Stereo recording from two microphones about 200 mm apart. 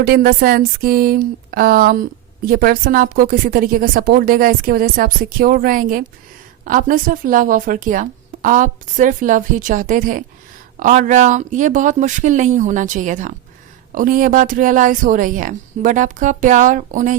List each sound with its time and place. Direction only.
0.0 s speech: 45° right (ahead or behind)